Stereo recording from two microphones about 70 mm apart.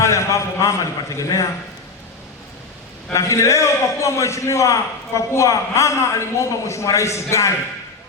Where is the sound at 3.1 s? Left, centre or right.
Left.